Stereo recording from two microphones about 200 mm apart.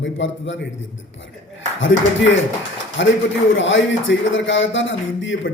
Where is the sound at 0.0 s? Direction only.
65° left (ahead or behind).